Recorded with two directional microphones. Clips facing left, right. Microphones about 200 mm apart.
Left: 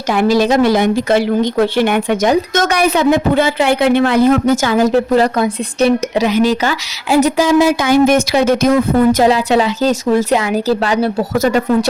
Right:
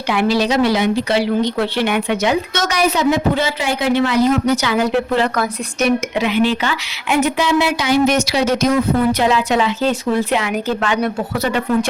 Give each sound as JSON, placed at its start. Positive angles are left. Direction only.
{"t": 0.1, "sound": "a woman's voice", "side_deg": 45}
{"t": 9.2, "sound": "speech", "side_deg": 35}